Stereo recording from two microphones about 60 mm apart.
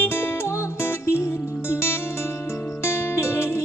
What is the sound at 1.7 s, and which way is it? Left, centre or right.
Music, left.